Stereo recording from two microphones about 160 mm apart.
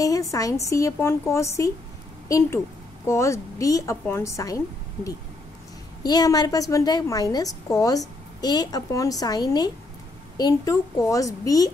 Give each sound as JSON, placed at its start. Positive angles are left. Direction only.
{"t": 0.0, "sound": "a woman's voice", "side_deg": 20}
{"t": 6.0, "sound": "a woman's voice", "side_deg": 25}